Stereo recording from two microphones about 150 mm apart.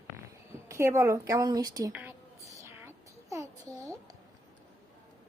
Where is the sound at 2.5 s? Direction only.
20° right (ahead or behind).